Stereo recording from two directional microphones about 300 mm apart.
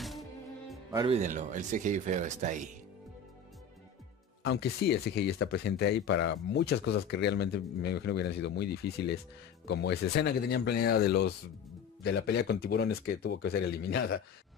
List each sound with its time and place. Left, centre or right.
0.9 s speech: centre
4.5 s speech: left